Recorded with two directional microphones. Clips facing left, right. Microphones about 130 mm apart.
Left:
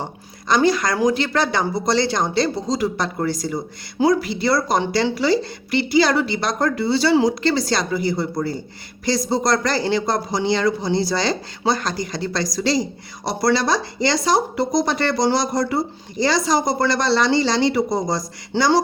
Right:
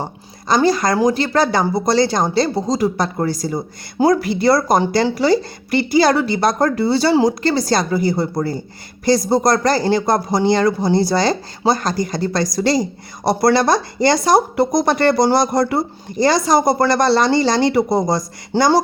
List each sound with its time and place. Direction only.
0.4 s speech: 35° right (ahead or behind)